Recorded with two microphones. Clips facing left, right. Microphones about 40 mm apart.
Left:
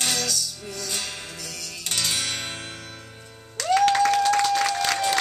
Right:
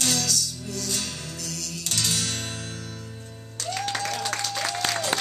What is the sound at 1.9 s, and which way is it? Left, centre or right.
Music, left.